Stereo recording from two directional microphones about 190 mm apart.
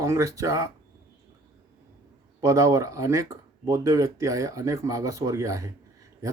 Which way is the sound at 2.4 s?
15° right (ahead or behind).